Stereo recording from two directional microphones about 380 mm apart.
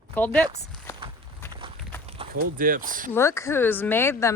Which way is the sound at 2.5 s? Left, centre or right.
Right.